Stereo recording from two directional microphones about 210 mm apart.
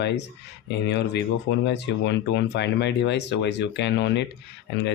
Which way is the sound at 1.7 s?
55° left (ahead or behind).